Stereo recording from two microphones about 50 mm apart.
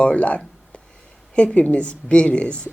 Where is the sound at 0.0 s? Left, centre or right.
Left.